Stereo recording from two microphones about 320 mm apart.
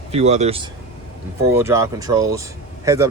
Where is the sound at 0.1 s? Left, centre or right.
Centre.